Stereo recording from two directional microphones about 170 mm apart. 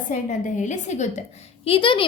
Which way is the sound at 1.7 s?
30° left (ahead or behind).